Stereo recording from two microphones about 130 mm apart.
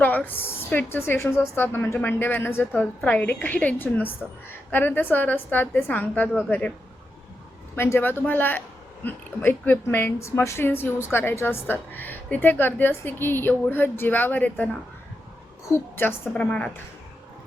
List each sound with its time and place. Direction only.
0.0 s a woman's voice: 10° left (ahead or behind)
7.8 s a woman's voice: 15° left (ahead or behind)
15.7 s a woman's voice: 15° left (ahead or behind)